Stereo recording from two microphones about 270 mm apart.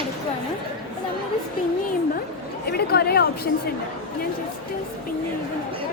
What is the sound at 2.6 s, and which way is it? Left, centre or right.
Chatter, left.